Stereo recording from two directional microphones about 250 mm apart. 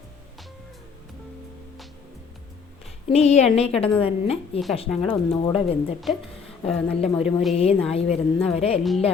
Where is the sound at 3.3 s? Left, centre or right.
Left.